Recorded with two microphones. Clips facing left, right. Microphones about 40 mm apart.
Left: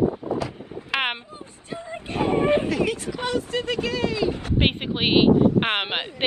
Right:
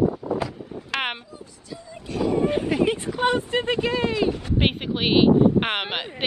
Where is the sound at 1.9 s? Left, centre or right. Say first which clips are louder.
Left 1 dB; left.